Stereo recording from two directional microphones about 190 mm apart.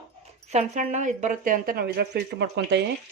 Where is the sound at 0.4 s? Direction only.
35° right (ahead or behind).